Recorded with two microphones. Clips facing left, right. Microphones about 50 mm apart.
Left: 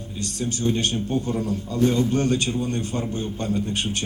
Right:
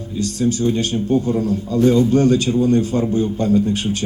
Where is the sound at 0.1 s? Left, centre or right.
Left.